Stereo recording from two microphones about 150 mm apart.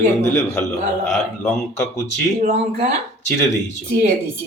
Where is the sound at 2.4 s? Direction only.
50° right (ahead or behind).